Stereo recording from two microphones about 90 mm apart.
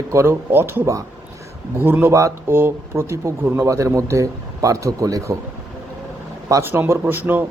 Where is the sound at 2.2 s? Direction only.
35° right (ahead or behind).